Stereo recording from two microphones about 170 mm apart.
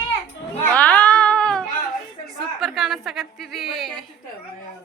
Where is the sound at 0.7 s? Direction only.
10° left (ahead or behind).